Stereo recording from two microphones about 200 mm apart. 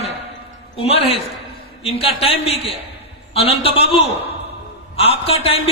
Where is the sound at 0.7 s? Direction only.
30° left (ahead or behind).